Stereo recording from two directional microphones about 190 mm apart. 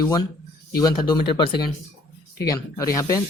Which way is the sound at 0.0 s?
20° left (ahead or behind).